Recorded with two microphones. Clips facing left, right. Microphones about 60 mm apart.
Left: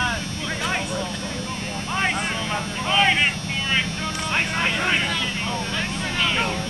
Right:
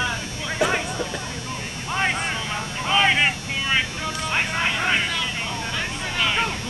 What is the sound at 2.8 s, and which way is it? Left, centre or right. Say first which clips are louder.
Vehicle: right 1 dB; centre.